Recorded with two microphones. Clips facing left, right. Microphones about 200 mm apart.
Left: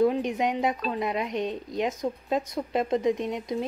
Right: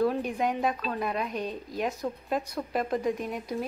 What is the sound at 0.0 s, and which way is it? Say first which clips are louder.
Speech: left 3 dB; 20° left (ahead or behind).